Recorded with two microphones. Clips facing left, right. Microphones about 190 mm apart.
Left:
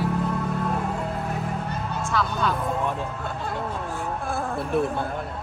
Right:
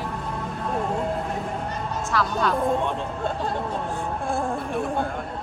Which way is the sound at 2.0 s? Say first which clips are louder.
Right 2 dB; centre (ahead or behind).